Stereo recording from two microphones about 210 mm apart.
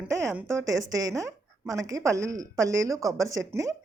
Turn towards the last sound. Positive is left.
turn(degrees=-15)  # may be behind; listen again after turning